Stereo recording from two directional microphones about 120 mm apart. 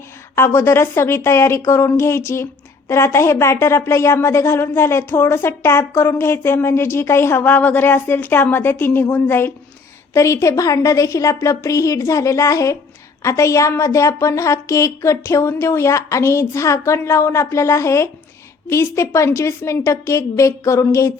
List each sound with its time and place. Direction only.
0.3 s speech: 20° left (ahead or behind)